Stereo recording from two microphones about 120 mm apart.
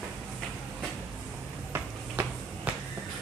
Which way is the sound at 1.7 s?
15° right (ahead or behind).